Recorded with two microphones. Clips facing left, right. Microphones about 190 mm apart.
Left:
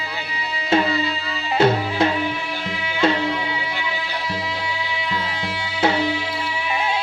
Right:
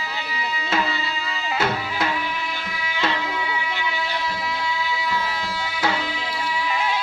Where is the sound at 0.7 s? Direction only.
30° left (ahead or behind).